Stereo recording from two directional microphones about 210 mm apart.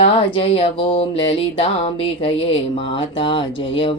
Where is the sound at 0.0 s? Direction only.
25° left (ahead or behind).